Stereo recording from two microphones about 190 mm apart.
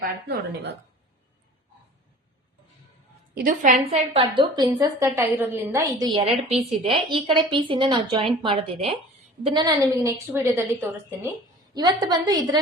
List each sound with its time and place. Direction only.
0.3 s a woman's voice: 65° right (ahead or behind)
3.3 s a woman's voice: 45° right (ahead or behind)
3.9 s a woman's voice: 30° right (ahead or behind)